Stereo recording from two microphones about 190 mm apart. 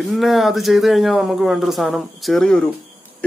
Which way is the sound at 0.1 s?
Centre (ahead or behind).